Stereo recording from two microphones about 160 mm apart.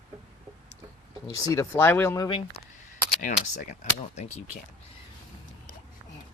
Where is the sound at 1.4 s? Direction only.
20° left (ahead or behind).